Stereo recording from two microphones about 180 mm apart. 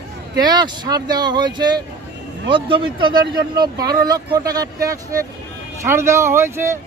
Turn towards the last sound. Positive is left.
turn(degrees=-15)  # may be behind; listen again after turning